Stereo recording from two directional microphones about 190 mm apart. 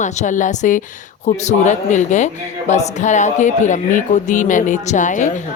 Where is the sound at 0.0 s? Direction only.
40° left (ahead or behind).